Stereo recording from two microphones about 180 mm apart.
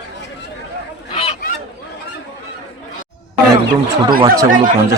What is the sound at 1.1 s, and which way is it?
Fowl, 30° left (ahead or behind).